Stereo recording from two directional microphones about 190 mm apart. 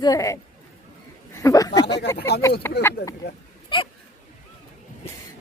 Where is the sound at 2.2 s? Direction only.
60° left (ahead or behind).